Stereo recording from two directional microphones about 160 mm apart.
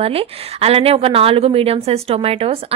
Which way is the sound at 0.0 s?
35° right (ahead or behind).